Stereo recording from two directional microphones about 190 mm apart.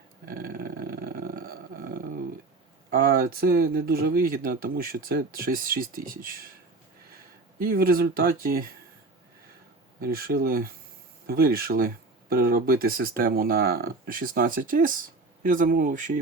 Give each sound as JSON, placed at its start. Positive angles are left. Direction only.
{"t": 0.3, "sound": "a sound", "side_deg": -50}
{"t": 2.9, "sound": "speech", "side_deg": -50}
{"t": 7.6, "sound": "speech", "side_deg": -50}
{"t": 10.0, "sound": "speech", "side_deg": -50}